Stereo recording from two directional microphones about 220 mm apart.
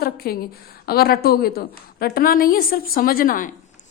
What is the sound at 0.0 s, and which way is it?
A woman's voice, 45° left (ahead or behind).